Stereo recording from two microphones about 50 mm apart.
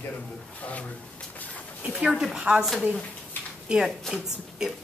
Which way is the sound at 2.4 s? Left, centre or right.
Right.